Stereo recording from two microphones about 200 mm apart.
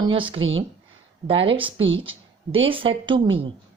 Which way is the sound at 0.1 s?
25° right (ahead or behind).